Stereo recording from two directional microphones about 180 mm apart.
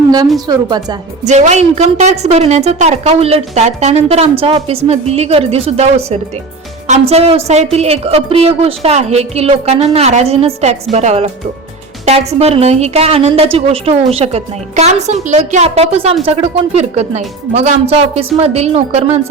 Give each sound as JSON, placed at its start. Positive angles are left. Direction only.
{"t": 0.4, "sound": "a woman's voice", "side_deg": -20}
{"t": 1.2, "sound": "a woman's voice", "side_deg": -40}